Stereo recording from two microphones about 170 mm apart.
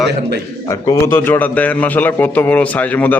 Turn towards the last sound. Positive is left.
turn(degrees=10)  # may be behind; listen again after turning